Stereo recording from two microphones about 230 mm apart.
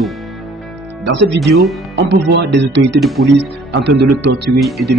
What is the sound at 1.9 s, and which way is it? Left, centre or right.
A man's voice, right.